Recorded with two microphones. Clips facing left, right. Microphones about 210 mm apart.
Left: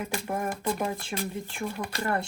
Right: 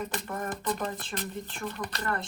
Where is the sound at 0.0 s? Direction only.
10° left (ahead or behind).